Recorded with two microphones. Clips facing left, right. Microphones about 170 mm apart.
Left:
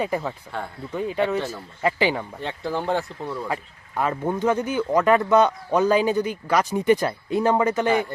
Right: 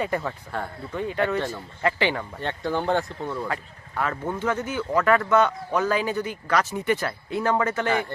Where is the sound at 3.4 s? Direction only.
15° left (ahead or behind).